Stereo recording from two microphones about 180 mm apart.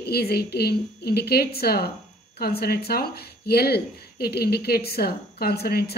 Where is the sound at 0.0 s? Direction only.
60° left (ahead or behind).